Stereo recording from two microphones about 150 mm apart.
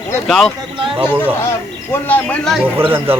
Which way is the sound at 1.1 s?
10° right (ahead or behind).